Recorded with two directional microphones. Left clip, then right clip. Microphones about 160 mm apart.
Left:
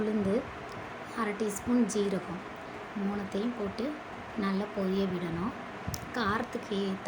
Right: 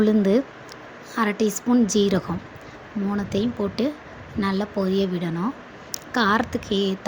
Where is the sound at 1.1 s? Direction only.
55° right (ahead or behind).